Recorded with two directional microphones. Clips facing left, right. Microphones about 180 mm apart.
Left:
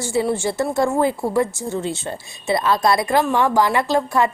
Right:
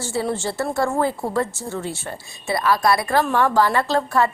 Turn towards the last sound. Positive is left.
turn(degrees=15)  # may be behind; listen again after turning